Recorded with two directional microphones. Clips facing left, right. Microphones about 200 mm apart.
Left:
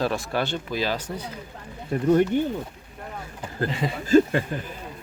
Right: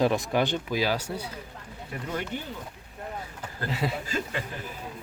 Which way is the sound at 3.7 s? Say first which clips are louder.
Left 2 dB; 5° right (ahead or behind).